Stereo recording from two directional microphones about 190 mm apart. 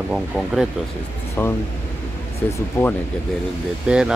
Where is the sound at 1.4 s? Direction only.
10° left (ahead or behind).